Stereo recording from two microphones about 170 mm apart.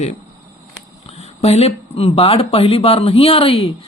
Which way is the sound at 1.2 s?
40° left (ahead or behind).